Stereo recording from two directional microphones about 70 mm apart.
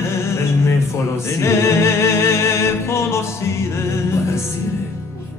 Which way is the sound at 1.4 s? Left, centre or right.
Left.